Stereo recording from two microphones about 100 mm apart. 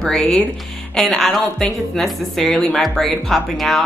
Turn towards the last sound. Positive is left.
turn(degrees=0)  # may be behind; listen again after turning